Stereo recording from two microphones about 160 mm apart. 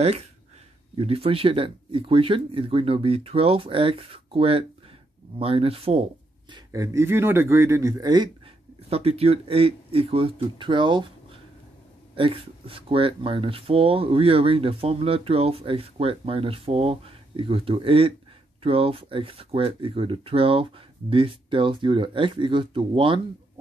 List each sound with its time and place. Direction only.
0.9 s speech: 40° right (ahead or behind)
6.5 s speech: 20° right (ahead or behind)
8.8 s speech: 40° right (ahead or behind)
12.2 s speech: 35° right (ahead or behind)